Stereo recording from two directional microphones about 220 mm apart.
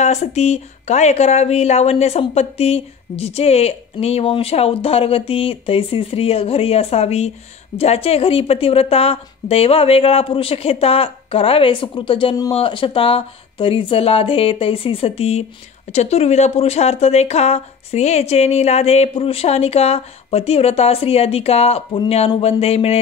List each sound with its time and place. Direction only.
0.0 s speech: 30° left (ahead or behind)